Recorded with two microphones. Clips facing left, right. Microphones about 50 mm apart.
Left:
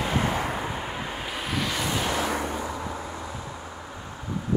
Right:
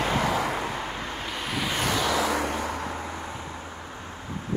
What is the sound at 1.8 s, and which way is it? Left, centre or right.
Vehicle, right.